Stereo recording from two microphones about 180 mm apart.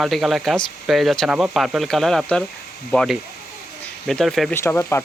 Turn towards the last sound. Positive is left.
turn(degrees=15)  # may be behind; listen again after turning